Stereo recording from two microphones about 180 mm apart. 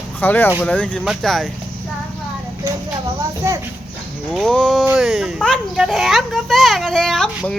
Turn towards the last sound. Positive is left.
turn(degrees=5)  # may be behind; listen again after turning